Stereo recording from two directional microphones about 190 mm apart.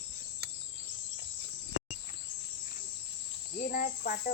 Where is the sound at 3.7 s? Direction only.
50° left (ahead or behind).